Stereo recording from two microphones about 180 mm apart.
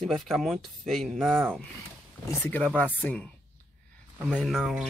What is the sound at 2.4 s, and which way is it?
Speech, 10° left (ahead or behind).